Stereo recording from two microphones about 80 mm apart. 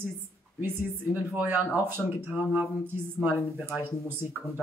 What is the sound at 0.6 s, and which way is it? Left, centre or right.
Speech, right.